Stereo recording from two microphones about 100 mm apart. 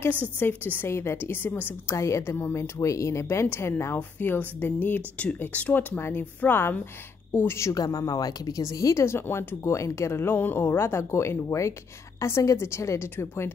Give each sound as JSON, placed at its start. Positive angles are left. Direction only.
{"t": 0.4, "sound": "a woman's voice", "side_deg": 20}
{"t": 7.7, "sound": "a woman's voice", "side_deg": 40}